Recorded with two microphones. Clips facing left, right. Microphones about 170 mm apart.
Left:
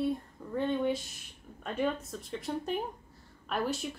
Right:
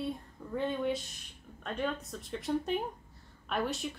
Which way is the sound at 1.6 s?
5° left (ahead or behind).